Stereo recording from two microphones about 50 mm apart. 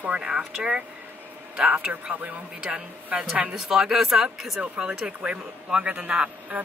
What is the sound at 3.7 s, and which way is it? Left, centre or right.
Speech, centre.